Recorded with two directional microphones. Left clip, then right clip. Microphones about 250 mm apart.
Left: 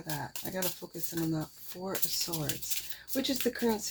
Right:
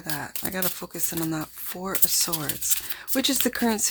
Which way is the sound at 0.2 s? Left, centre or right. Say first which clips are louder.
Right 6 dB; right.